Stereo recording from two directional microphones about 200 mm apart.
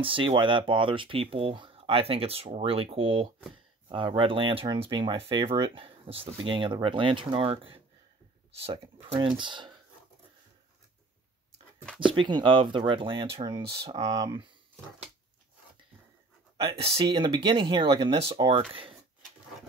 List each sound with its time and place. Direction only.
0.0 s speech: 25° right (ahead or behind)
12.0 s speech: 25° right (ahead or behind)
16.5 s speech: 25° right (ahead or behind)